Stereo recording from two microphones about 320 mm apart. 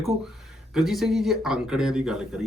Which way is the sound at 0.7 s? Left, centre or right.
Centre.